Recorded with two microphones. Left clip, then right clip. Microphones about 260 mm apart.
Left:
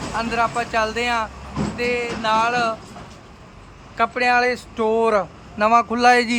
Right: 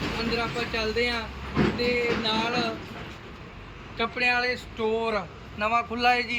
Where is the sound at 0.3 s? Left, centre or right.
Centre.